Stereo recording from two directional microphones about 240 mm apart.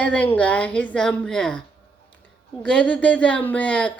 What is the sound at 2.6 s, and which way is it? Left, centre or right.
A woman's voice, centre.